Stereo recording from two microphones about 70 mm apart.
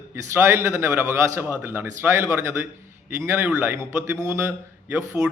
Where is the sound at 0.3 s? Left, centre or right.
Right.